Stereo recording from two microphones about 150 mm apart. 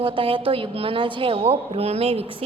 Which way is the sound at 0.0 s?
35° right (ahead or behind).